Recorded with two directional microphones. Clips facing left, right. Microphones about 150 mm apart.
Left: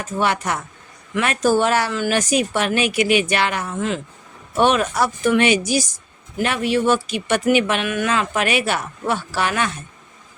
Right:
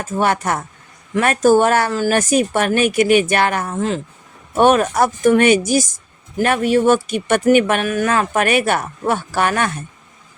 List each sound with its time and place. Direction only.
0.0 s speech: 50° right (ahead or behind)